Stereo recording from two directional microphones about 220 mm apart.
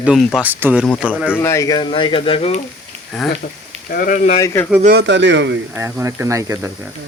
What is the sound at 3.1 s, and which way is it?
Speech, centre (ahead or behind).